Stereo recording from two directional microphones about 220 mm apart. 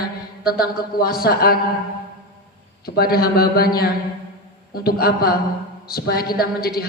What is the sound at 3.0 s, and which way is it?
Music, 45° left (ahead or behind).